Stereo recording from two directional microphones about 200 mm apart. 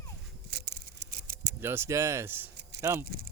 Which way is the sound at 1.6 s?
10° right (ahead or behind).